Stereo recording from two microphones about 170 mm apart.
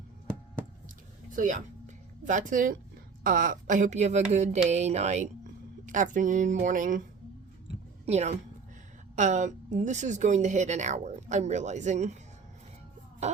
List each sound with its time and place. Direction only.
1.4 s speech: 50° right (ahead or behind)
8.0 s a woman's voice: 40° right (ahead or behind)